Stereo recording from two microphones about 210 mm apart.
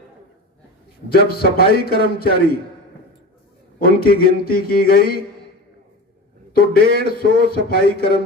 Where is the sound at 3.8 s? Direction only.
45° left (ahead or behind).